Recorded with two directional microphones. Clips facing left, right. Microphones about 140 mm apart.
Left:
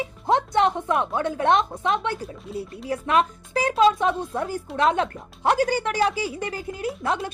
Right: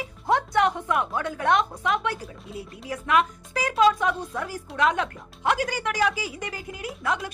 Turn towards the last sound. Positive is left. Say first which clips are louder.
# left 3 dB
turn(degrees=30)  # may be behind; listen again after turning